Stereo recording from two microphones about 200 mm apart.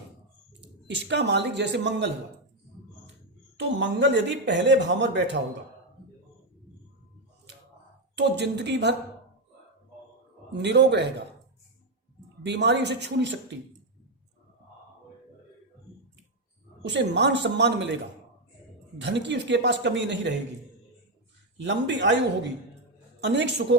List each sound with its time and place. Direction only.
0.6 s speech: 60° right (ahead or behind)
3.6 s speech: 60° right (ahead or behind)
8.1 s speech: 60° right (ahead or behind)
10.5 s speech: 60° right (ahead or behind)
12.5 s speech: 60° right (ahead or behind)
16.8 s speech: 60° right (ahead or behind)
18.9 s speech: 60° right (ahead or behind)
21.6 s speech: 65° right (ahead or behind)
23.2 s speech: 60° right (ahead or behind)